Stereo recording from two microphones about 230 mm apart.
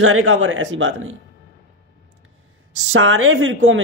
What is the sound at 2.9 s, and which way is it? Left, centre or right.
Speech, right.